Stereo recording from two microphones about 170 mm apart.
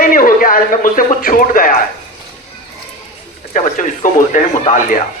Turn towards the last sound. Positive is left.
turn(degrees=50)  # may be behind; listen again after turning